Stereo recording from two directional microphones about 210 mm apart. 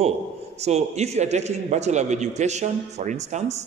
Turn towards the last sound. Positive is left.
turn(degrees=-35)  # may be behind; listen again after turning